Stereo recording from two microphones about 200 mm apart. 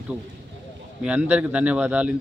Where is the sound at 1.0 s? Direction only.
5° right (ahead or behind).